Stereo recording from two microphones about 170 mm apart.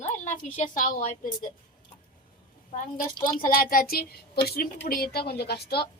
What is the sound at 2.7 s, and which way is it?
A woman's voice, 50° left (ahead or behind).